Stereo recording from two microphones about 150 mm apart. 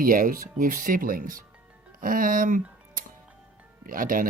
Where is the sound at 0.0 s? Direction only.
70° right (ahead or behind).